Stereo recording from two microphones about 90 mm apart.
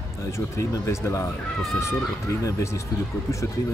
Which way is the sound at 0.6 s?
35° left (ahead or behind).